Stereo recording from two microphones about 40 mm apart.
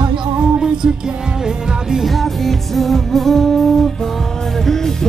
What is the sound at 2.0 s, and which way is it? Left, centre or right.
Music, centre.